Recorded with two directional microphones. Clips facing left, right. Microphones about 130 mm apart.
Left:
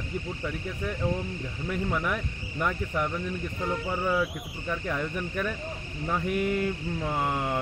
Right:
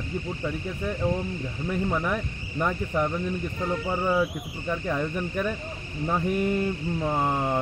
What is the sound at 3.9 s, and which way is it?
Speech, 20° right (ahead or behind).